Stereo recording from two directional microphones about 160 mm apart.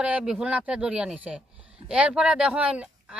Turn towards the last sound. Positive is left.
turn(degrees=-5)  # may be behind; listen again after turning